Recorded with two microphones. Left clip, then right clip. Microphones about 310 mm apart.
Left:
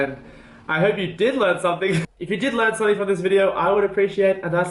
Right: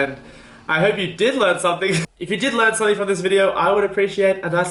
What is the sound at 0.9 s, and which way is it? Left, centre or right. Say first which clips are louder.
A man's voice: right 2 dB; centre.